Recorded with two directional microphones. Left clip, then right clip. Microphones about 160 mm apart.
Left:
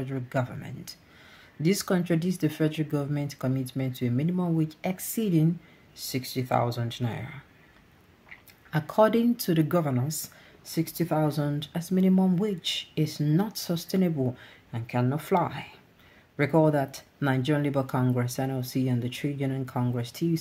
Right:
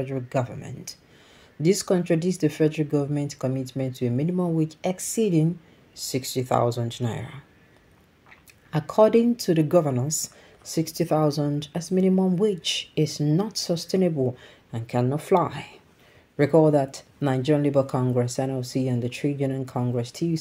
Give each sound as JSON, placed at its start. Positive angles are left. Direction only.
{"t": 0.0, "sound": "speech", "side_deg": -10}